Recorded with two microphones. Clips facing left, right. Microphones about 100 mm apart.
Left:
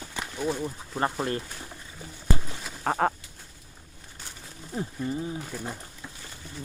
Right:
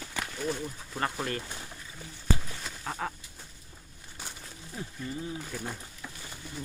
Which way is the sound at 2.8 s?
55° left (ahead or behind).